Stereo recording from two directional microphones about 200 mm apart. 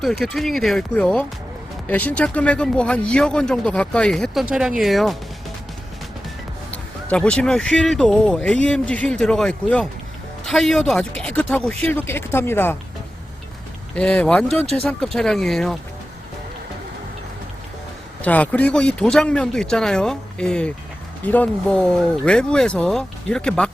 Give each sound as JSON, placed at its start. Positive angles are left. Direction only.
{"t": 0.0, "sound": "speech", "side_deg": 0}
{"t": 7.1, "sound": "speech", "side_deg": 5}
{"t": 13.9, "sound": "speech", "side_deg": 5}
{"t": 18.2, "sound": "speech", "side_deg": 5}